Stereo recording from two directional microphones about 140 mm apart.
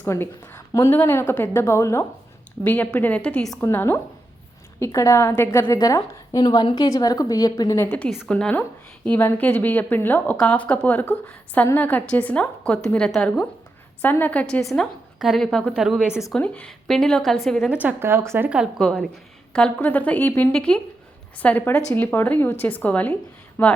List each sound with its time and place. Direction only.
0.0 s a woman's voice: 15° left (ahead or behind)
3.6 s a woman's voice: 15° left (ahead or behind)
7.9 s a woman's voice: 10° left (ahead or behind); by 16.2 s 5° right (ahead or behind)
16.3 s a woman's voice: 10° left (ahead or behind)
17.7 s speech: 15° right (ahead or behind)
18.4 s a woman's voice: 5° right (ahead or behind); by 23.7 s 15° left (ahead or behind)